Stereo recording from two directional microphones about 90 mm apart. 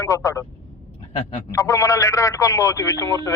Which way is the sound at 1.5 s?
30° left (ahead or behind).